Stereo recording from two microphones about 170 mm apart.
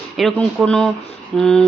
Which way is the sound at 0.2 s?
Centre (ahead or behind).